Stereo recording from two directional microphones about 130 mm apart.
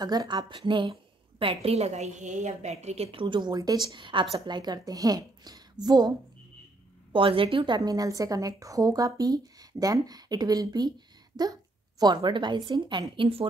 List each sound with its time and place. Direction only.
0.0 s a woman's voice: 30° right (ahead or behind)
0.5 s a woman's voice: 40° right (ahead or behind)
7.1 s a woman's voice: 40° right (ahead or behind)